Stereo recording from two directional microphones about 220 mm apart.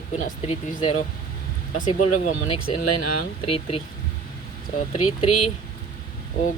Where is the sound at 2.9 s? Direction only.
90° left.